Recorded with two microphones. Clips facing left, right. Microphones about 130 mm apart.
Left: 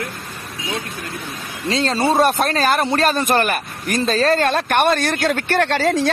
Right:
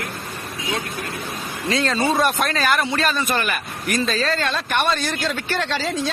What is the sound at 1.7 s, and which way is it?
Speech, 30° left (ahead or behind).